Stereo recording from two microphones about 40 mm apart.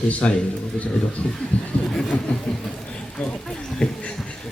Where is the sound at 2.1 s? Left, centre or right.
Left.